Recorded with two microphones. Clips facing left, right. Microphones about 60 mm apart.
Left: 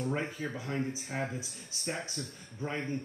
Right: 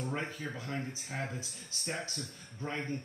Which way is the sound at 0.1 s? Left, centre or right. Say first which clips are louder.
Left 3 dB; centre.